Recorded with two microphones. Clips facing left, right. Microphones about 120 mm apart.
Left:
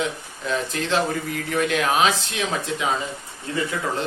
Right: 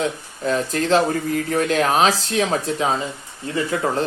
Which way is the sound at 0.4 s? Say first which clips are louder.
Right 5 dB; 40° right (ahead or behind).